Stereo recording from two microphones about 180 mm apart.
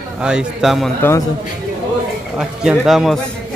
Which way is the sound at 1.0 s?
15° left (ahead or behind).